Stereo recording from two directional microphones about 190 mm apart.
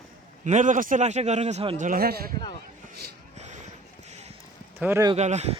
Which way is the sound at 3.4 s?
40° right (ahead or behind).